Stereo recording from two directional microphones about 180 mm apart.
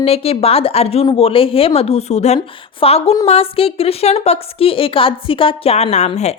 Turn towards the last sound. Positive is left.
turn(degrees=35)  # may be behind; listen again after turning